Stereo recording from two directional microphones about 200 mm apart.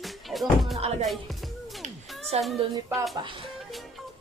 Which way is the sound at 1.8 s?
30° right (ahead or behind).